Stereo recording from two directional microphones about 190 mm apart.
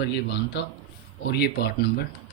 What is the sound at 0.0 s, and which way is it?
Speech, 60° left (ahead or behind).